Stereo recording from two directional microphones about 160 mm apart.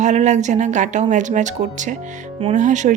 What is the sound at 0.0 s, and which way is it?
Speech, 45° right (ahead or behind).